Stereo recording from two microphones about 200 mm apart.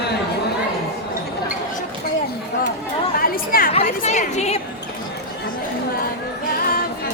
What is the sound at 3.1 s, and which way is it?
Chatter, 45° left (ahead or behind).